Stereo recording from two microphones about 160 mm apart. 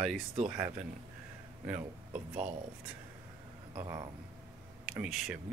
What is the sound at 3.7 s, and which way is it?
Speech, 25° right (ahead or behind).